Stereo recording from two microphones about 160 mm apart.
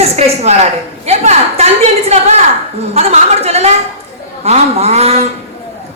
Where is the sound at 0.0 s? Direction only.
40° right (ahead or behind).